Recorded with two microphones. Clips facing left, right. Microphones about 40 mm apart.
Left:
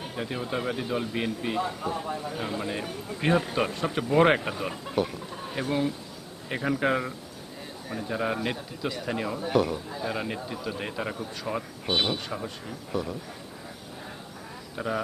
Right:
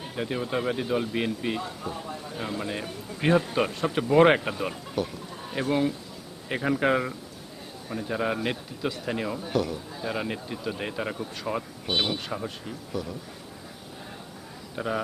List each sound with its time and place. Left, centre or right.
0.2 s a man's voice: centre
1.8 s speech: left
2.4 s a man's voice: centre
5.0 s speech: left
5.5 s a man's voice: centre
9.5 s a man's voice: left
10.0 s a man's voice: centre
12.9 s speech: left
14.8 s a man's voice: centre